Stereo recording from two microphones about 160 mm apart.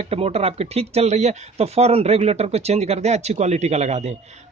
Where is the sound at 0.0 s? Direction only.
40° right (ahead or behind).